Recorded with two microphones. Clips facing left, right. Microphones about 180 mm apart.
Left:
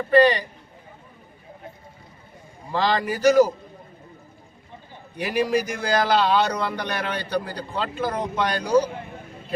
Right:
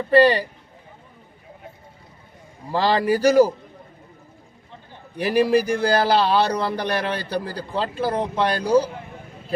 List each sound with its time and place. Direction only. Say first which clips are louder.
0.1 s a man's voice: right 1 dB; 35° right (ahead or behind)
2.7 s a man's voice: right 4 dB; 35° right (ahead or behind)
5.1 s a man's voice: right 4 dB; 35° right (ahead or behind)